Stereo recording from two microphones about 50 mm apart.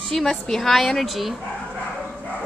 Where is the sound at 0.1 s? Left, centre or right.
Centre.